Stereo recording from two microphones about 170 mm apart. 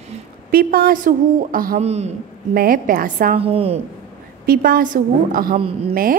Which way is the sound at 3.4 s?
35° right (ahead or behind).